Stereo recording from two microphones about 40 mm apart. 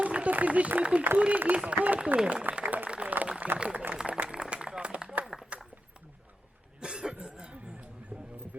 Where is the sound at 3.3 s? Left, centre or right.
Right.